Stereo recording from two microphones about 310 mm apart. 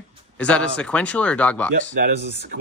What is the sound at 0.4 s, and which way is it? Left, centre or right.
Speech, centre.